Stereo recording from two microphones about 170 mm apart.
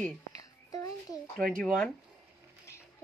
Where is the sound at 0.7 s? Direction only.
20° left (ahead or behind).